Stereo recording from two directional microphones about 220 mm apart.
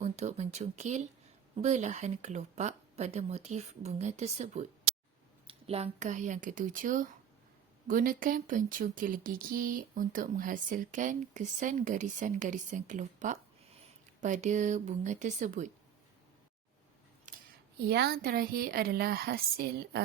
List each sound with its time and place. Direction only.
0.0 s speech: 30° right (ahead or behind)
17.3 s a sound: 35° right (ahead or behind)
17.8 s a woman's voice: 45° right (ahead or behind)